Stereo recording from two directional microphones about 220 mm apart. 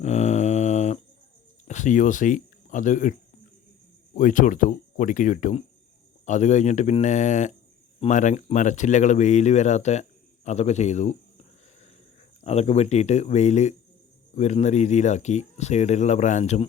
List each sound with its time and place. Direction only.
0.0 s mantra: 30° left (ahead or behind)
1.6 s speech: 35° left (ahead or behind)
12.4 s speech: 30° left (ahead or behind)